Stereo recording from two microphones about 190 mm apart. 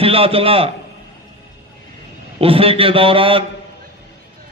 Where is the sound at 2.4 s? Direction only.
30° right (ahead or behind).